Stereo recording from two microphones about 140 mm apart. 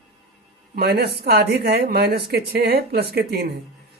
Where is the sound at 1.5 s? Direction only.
90° right.